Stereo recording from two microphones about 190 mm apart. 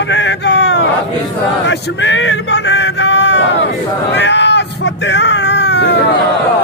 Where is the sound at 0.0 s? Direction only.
70° left (ahead or behind).